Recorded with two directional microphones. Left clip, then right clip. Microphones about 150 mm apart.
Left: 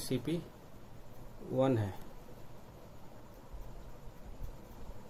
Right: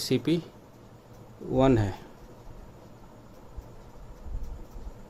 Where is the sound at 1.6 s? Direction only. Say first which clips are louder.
Right 8 dB; 60° right (ahead or behind).